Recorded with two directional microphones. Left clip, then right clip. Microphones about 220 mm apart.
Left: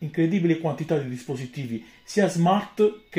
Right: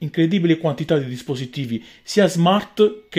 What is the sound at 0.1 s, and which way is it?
Speech, 40° right (ahead or behind).